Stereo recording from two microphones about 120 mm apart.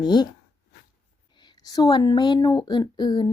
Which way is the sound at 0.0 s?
35° left (ahead or behind).